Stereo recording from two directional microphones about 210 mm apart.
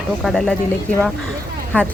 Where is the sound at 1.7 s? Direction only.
5° left (ahead or behind).